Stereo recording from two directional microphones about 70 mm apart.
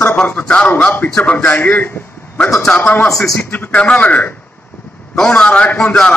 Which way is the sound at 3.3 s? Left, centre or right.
Left.